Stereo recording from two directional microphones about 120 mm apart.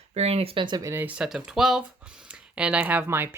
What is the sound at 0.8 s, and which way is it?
Speech, 25° right (ahead or behind).